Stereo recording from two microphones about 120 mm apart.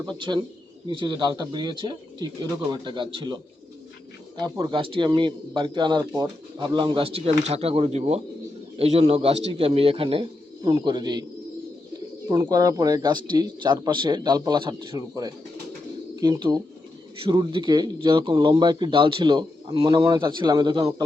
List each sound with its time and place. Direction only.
0.0 s a man's voice: 40° right (ahead or behind)
10.6 s speech: 35° right (ahead or behind)
14.9 s speech: 30° right (ahead or behind)